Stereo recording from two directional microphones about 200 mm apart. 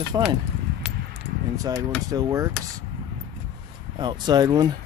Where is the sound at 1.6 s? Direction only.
15° right (ahead or behind).